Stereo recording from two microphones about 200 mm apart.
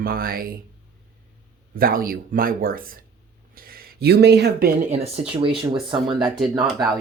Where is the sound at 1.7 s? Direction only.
45° right (ahead or behind).